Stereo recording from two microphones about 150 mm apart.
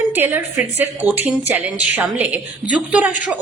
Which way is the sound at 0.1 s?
15° right (ahead or behind).